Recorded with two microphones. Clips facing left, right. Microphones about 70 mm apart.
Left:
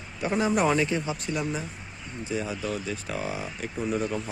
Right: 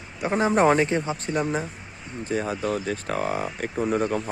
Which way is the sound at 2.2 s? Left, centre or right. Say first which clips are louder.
Right 4 dB; right.